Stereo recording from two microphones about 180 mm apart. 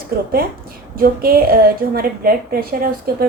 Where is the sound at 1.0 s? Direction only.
55° right (ahead or behind).